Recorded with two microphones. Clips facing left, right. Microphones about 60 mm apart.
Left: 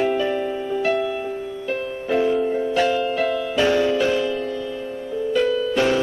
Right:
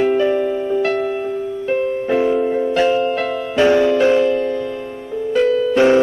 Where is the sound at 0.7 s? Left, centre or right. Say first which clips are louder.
Right 3 dB; right.